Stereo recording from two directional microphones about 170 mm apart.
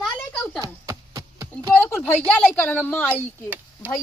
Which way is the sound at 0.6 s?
20° right (ahead or behind).